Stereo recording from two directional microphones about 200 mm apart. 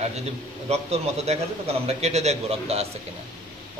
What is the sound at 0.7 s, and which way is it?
A man's voice, 30° right (ahead or behind).